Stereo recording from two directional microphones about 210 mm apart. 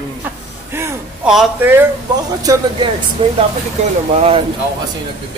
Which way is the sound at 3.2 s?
30° right (ahead or behind).